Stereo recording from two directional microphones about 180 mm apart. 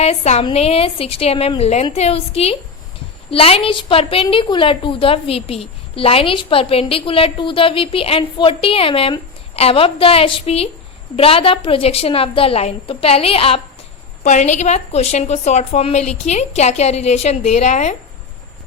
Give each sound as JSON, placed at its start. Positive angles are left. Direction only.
{"t": 0.0, "sound": "a woman's voice", "side_deg": 35}